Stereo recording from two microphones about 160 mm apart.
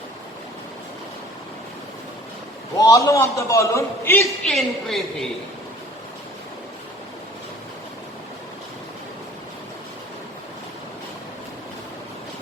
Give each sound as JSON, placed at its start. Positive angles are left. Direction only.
{"t": 2.7, "sound": "a man's voice", "side_deg": 20}
{"t": 4.5, "sound": "a woman's voice", "side_deg": 0}